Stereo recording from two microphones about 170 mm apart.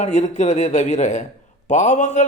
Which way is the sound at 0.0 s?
45° left (ahead or behind).